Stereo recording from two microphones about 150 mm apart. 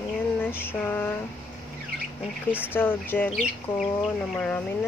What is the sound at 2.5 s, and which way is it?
Speech, 15° left (ahead or behind).